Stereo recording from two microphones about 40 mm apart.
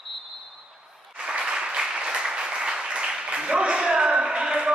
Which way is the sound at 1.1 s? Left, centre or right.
Right.